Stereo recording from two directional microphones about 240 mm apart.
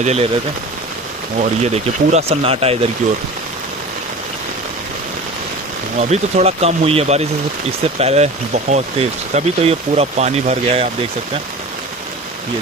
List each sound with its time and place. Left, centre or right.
0.0 s speech: right
1.4 s speech: right
5.9 s speech: right